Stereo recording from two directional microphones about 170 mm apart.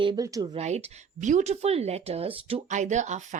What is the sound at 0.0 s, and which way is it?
Speech, 25° right (ahead or behind).